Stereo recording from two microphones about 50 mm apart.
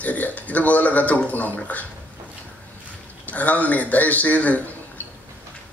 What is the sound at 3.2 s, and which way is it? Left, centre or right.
Speech, left.